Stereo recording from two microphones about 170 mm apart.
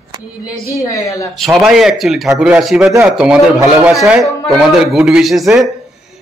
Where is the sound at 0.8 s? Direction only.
20° left (ahead or behind).